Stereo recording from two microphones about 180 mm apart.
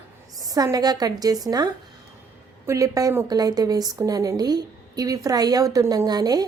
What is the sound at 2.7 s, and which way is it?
Speech, 20° right (ahead or behind).